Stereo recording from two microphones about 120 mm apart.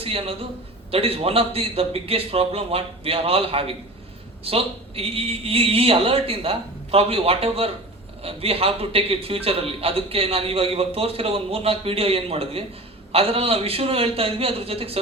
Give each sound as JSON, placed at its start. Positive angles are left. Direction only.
{"t": 0.0, "sound": "a man's voice", "side_deg": -50}